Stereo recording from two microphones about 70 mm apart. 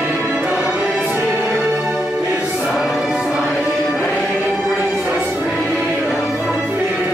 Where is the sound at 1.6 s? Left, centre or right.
Right.